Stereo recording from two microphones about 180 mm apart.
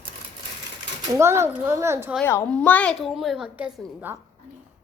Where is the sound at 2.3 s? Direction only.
10° left (ahead or behind).